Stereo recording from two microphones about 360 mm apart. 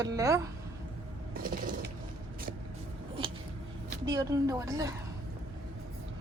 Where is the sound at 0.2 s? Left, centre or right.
Centre.